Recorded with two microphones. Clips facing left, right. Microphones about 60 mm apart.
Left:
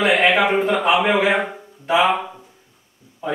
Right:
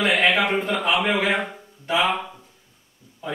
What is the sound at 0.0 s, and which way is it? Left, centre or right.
A man's voice, centre.